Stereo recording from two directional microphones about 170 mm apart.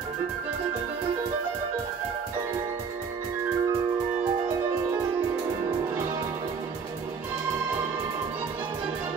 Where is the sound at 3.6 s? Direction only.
15° right (ahead or behind).